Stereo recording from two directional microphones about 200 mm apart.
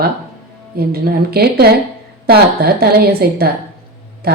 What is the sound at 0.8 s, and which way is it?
A woman's voice, 50° right (ahead or behind).